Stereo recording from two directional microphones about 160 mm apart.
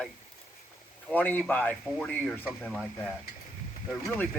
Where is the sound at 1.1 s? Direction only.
10° left (ahead or behind).